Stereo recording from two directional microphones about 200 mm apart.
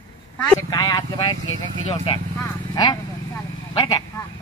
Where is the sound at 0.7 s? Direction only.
20° left (ahead or behind).